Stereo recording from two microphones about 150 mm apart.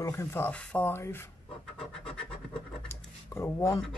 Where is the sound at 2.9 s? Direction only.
15° left (ahead or behind).